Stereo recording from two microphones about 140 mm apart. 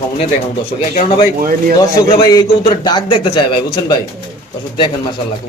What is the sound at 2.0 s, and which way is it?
Speech, 25° left (ahead or behind).